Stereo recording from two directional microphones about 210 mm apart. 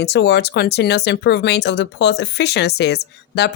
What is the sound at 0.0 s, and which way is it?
Speech, 55° left (ahead or behind).